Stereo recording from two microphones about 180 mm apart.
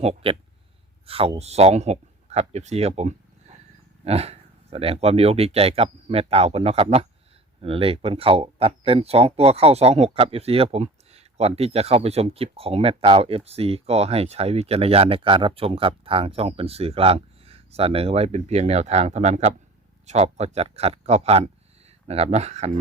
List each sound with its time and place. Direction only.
0.0 s speech: 35° right (ahead or behind)